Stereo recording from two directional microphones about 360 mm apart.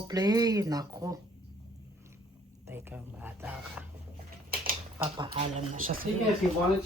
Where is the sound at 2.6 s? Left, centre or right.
Centre.